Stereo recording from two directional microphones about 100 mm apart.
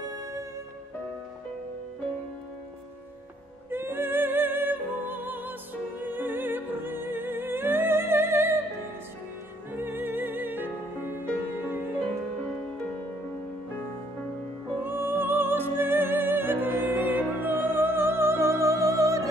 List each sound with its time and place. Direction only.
3.7 s music: 20° right (ahead or behind)
9.7 s music: 20° right (ahead or behind)
14.8 s music: 20° right (ahead or behind)